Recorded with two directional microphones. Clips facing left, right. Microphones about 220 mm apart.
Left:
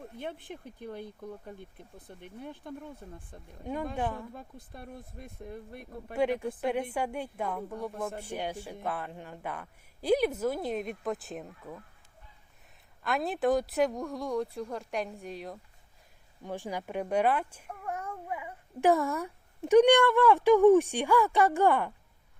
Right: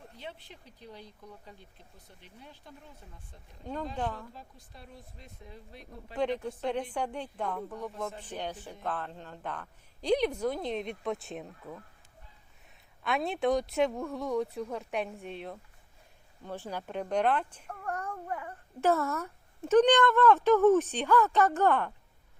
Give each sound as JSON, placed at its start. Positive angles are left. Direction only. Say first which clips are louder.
{"t": 0.2, "sound": "speech", "louder": "left 6 dB", "side_deg": 55}
{"t": 3.6, "sound": "speech", "louder": "left 2 dB", "side_deg": 10}
{"t": 4.4, "sound": "speech", "louder": "left 5 dB", "side_deg": 55}
{"t": 6.1, "sound": "speech", "louder": "left 2 dB", "side_deg": 10}
{"t": 13.0, "sound": "a woman's voice", "louder": "left 1 dB", "side_deg": 0}
{"t": 16.4, "sound": "speech", "louder": "left 2 dB", "side_deg": 15}